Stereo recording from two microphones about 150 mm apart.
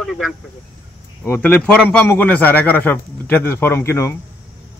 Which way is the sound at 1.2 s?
15° left (ahead or behind).